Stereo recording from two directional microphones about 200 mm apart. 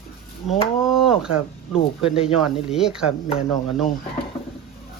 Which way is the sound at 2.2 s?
30° left (ahead or behind).